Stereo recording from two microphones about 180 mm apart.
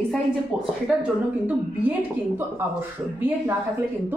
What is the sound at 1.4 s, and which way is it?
A woman's voice, 10° right (ahead or behind).